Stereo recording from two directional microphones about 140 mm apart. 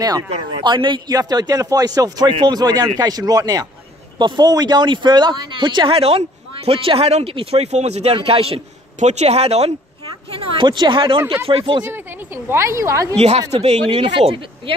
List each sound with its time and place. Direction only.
0.7 s a man's voice: 35° right (ahead or behind)
12.4 s a man's voice: 20° right (ahead or behind)
13.5 s speech: 50° right (ahead or behind)
13.8 s speech: 35° right (ahead or behind)